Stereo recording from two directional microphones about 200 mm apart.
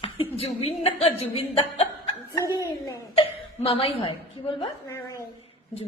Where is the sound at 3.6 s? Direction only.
30° left (ahead or behind).